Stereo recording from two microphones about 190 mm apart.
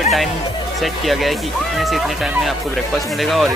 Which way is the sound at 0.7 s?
Centre (ahead or behind).